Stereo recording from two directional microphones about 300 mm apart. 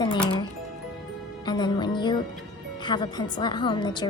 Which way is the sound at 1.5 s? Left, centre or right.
Centre.